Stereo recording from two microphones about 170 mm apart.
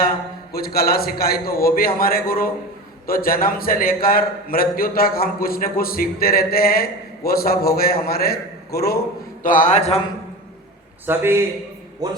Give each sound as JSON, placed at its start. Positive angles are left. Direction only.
{"t": 0.5, "sound": "a man's voice", "side_deg": 60}
{"t": 9.4, "sound": "a man's voice", "side_deg": 50}
{"t": 11.0, "sound": "a man's voice", "side_deg": -15}